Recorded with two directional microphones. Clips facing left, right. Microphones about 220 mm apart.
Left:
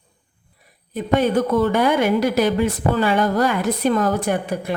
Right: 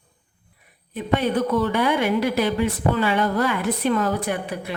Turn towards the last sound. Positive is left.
turn(degrees=45)  # may be behind; listen again after turning